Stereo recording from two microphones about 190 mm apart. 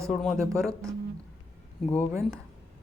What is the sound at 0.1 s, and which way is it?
Speech, centre (ahead or behind).